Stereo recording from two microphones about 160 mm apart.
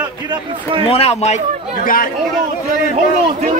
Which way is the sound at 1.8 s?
60° left (ahead or behind).